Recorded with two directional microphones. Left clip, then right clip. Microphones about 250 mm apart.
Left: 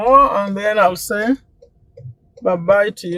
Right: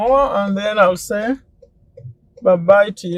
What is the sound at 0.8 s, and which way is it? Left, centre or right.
Speech, left.